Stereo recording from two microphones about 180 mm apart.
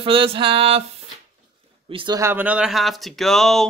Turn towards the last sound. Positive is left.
turn(degrees=0)  # may be behind; listen again after turning